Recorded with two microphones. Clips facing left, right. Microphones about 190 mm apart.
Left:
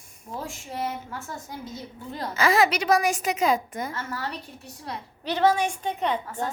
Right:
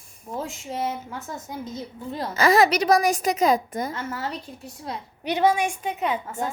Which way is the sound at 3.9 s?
20° right (ahead or behind).